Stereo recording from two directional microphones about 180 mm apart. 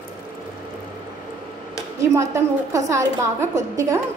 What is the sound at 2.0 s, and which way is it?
A woman's voice, 15° right (ahead or behind).